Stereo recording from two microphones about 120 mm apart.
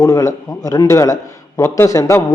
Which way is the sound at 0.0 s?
25° left (ahead or behind).